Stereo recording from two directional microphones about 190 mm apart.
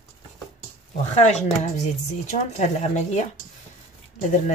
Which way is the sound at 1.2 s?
35° left (ahead or behind).